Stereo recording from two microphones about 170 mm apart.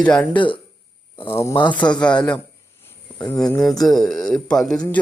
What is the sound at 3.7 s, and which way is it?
Speech, centre (ahead or behind).